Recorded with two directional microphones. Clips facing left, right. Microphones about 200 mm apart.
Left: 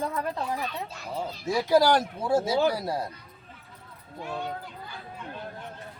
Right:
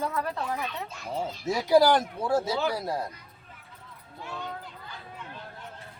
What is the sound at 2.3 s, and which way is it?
Speech, 10° left (ahead or behind).